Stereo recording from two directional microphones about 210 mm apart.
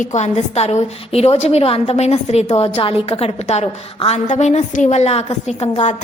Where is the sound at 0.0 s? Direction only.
35° left (ahead or behind).